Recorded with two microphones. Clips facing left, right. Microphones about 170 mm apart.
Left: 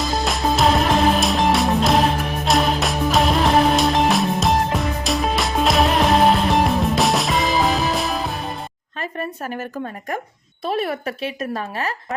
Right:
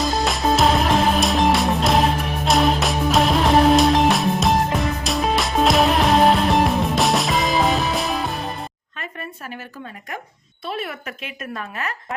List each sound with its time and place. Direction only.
0.0 s music: centre (ahead or behind)
9.0 s a sound: 40° left (ahead or behind)
10.7 s speech: 40° left (ahead or behind)